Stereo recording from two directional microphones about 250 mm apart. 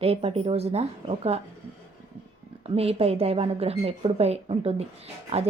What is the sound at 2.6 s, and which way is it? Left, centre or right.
A woman's voice, right.